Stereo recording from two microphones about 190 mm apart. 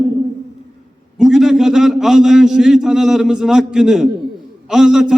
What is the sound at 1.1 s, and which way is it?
A man's voice, centre (ahead or behind).